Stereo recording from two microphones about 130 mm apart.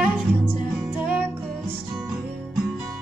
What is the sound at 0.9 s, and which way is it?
Music, 15° right (ahead or behind).